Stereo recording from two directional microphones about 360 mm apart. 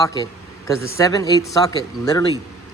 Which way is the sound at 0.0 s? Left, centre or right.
Centre.